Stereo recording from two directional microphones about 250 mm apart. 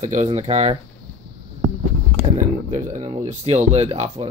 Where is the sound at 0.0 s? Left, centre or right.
Right.